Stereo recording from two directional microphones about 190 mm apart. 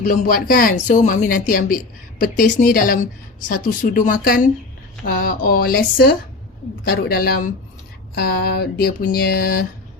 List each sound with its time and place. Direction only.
0.0 s speech: 45° left (ahead or behind)